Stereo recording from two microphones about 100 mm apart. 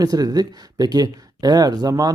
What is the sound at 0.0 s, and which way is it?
Speech, 40° right (ahead or behind).